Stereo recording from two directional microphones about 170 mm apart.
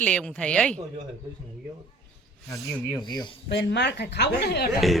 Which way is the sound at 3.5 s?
85° left.